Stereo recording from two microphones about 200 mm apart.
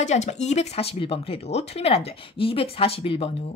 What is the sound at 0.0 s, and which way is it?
Speech, 35° left (ahead or behind).